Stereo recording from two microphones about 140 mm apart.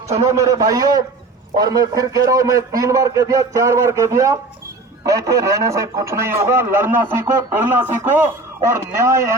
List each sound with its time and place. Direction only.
0.2 s speech: 25° right (ahead or behind)